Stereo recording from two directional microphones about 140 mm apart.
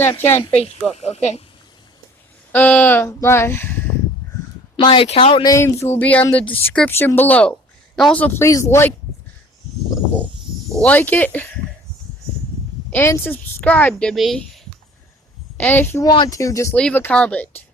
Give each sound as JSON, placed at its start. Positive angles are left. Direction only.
{"t": 0.2, "sound": "a woman's voice", "side_deg": 15}
{"t": 0.6, "sound": "speech", "side_deg": 50}
{"t": 2.5, "sound": "a woman's voice", "side_deg": 10}
{"t": 4.8, "sound": "speech", "side_deg": 35}
{"t": 5.5, "sound": "a woman's voice", "side_deg": 20}
{"t": 10.8, "sound": "a woman's voice", "side_deg": 10}
{"t": 12.9, "sound": "a woman's voice", "side_deg": 15}
{"t": 15.5, "sound": "a woman's voice", "side_deg": 15}
{"t": 16.0, "sound": "speech", "side_deg": 30}
{"t": 16.7, "sound": "a woman's voice", "side_deg": 5}